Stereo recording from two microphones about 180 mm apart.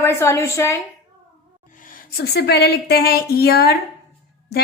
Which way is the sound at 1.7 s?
50° left (ahead or behind).